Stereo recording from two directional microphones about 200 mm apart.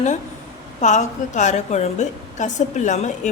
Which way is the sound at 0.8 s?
35° left (ahead or behind).